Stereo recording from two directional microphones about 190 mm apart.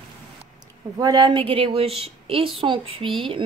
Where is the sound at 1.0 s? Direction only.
20° right (ahead or behind).